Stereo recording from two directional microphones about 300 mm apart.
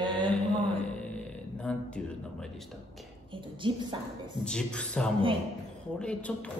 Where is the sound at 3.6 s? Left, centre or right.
Centre.